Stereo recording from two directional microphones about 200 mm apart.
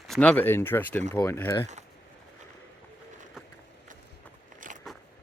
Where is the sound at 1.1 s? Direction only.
10° left (ahead or behind).